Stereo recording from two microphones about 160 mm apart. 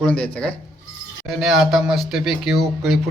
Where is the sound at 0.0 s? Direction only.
5° left (ahead or behind).